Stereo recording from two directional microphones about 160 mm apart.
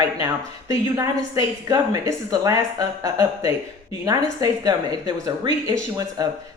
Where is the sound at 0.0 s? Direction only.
20° right (ahead or behind).